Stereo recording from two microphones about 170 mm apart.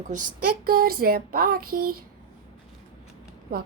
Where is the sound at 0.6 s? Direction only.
60° right (ahead or behind).